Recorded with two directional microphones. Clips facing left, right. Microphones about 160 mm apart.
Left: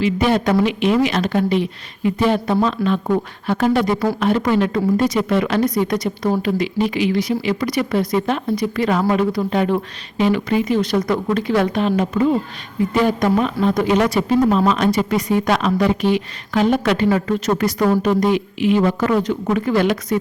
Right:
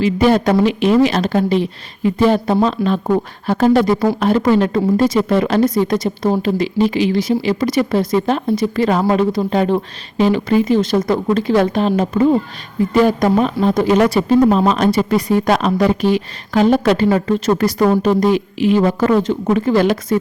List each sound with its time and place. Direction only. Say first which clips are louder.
0.0 s speech: right 4 dB; 35° right (ahead or behind)